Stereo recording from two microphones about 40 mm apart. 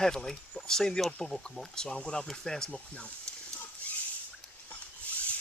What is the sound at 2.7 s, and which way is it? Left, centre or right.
Speech, left.